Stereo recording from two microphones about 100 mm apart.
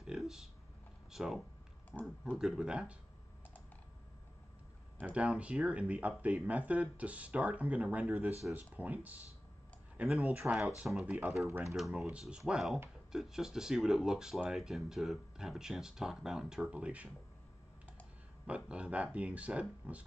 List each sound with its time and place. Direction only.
0.0 s a sound: 5° right (ahead or behind)
1.1 s speech: 5° right (ahead or behind)
5.0 s speech: 10° right (ahead or behind)
18.5 s speech: 10° right (ahead or behind)